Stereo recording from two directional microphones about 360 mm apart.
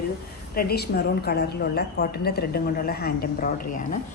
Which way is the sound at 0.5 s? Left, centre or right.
Left.